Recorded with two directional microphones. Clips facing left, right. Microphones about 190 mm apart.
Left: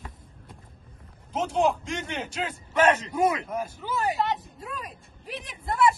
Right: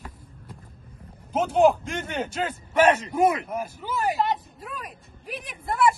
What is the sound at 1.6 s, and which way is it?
Speech, 55° right (ahead or behind).